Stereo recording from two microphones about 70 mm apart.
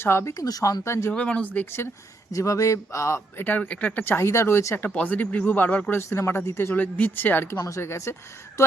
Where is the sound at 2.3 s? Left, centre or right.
Left.